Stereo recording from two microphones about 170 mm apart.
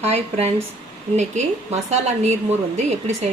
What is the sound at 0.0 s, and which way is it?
A woman's voice, 40° right (ahead or behind).